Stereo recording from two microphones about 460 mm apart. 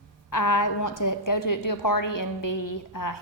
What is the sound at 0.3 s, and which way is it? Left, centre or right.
A woman's voice, left.